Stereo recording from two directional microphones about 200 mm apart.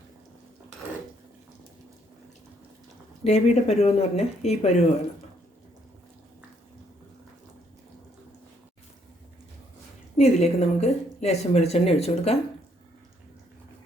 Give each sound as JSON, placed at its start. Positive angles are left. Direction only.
{"t": 3.2, "sound": "a woman's voice", "side_deg": 35}
{"t": 10.2, "sound": "a woman's voice", "side_deg": 35}